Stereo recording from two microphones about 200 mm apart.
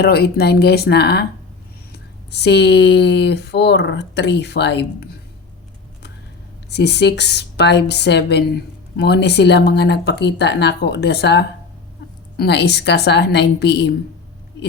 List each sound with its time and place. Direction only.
0.0 s speech: 50° left (ahead or behind)
6.7 s speech: 55° left (ahead or behind)